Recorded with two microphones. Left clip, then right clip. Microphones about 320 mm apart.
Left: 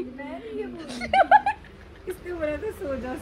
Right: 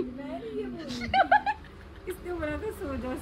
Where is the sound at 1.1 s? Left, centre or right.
Centre.